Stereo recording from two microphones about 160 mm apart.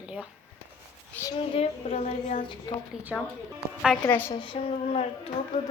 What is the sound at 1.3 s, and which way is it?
Speech, 40° left (ahead or behind).